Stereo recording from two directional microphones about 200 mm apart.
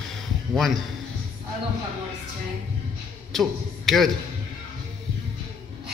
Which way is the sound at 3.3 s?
Centre (ahead or behind).